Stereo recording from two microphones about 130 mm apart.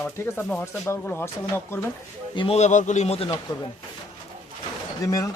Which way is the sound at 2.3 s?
50° left (ahead or behind).